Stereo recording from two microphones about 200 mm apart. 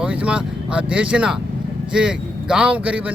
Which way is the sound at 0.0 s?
5° right (ahead or behind).